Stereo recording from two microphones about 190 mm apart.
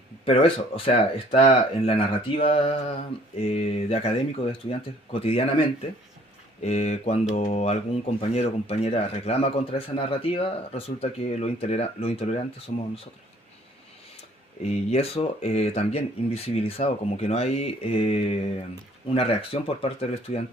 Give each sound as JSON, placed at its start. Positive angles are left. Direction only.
{"t": 0.3, "sound": "speech", "side_deg": 30}
{"t": 5.2, "sound": "speech", "side_deg": 30}
{"t": 6.6, "sound": "speech", "side_deg": 35}
{"t": 14.6, "sound": "speech", "side_deg": 35}